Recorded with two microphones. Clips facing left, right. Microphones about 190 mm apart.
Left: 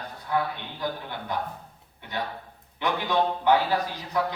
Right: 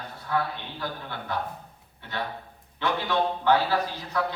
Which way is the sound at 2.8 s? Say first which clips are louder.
Left 1 dB; 15° left (ahead or behind).